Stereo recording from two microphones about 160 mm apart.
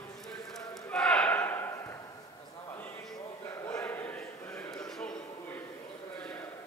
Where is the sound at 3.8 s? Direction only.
10° left (ahead or behind).